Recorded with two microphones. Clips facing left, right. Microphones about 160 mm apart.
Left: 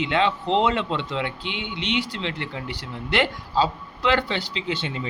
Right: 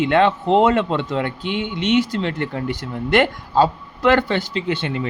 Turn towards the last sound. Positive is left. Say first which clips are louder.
# right 6 dB
turn(degrees=-55)  # may be behind; listen again after turning